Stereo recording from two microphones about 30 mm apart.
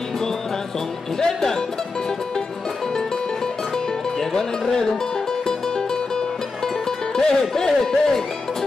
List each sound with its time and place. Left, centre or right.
1.2 s speech: centre
3.7 s music: centre
7.2 s speech: left